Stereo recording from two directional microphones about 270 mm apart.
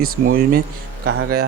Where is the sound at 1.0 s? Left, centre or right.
Right.